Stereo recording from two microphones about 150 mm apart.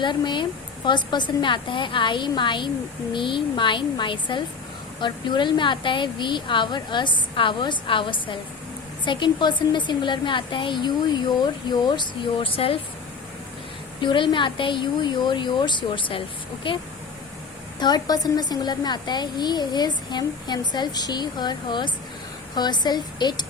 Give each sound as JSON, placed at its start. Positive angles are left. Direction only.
{"t": 0.0, "sound": "a woman's voice", "side_deg": 30}
{"t": 14.0, "sound": "a woman's voice", "side_deg": 30}